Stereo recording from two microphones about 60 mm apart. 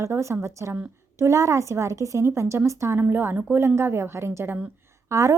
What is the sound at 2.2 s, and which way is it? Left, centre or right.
Speech, right.